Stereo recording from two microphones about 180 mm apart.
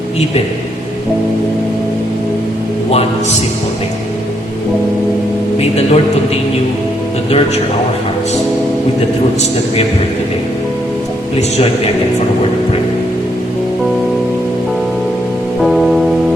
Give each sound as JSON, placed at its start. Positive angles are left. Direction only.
{"t": 5.5, "sound": "a man's voice", "side_deg": 35}
{"t": 7.3, "sound": "a man's voice", "side_deg": 35}
{"t": 15.6, "sound": "music", "side_deg": 0}